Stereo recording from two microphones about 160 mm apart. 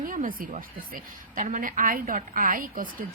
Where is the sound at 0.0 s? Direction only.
55° right (ahead or behind).